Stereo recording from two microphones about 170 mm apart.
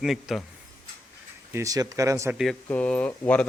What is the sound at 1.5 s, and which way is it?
Speech, 20° right (ahead or behind).